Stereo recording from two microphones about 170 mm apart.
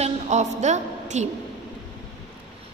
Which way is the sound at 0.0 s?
40° right (ahead or behind).